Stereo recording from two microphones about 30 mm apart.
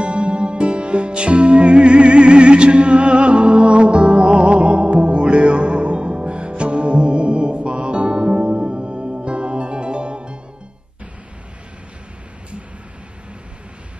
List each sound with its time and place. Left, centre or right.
0.0 s music: right